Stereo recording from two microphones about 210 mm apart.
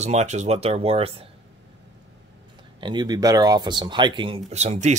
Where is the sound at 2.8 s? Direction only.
20° right (ahead or behind).